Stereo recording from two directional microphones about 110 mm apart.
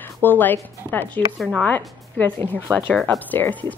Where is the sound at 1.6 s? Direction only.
15° left (ahead or behind).